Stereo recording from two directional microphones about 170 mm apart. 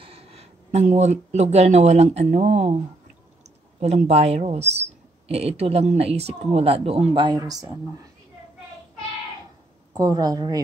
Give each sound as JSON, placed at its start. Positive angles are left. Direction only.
{"t": 0.0, "sound": "speech", "side_deg": -35}
{"t": 3.8, "sound": "speech", "side_deg": -40}
{"t": 9.9, "sound": "a woman's voice", "side_deg": -20}